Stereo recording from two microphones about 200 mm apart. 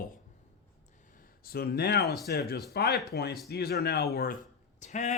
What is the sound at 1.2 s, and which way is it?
Speech, 50° left (ahead or behind).